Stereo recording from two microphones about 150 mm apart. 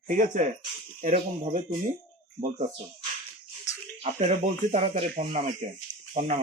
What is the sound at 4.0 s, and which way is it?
Speech, 40° right (ahead or behind).